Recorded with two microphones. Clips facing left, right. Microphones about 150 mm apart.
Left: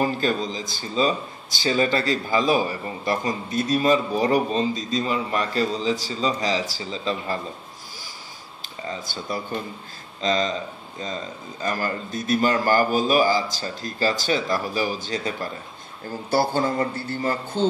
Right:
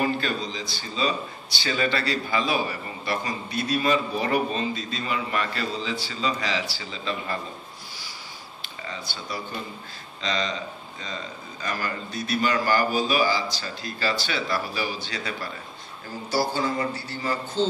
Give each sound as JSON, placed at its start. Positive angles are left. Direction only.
{"t": 0.0, "sound": "a man's voice", "side_deg": 40}
{"t": 8.8, "sound": "a man's voice", "side_deg": 45}